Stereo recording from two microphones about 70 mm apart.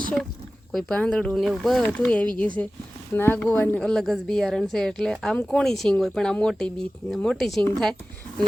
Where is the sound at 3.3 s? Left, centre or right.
Left.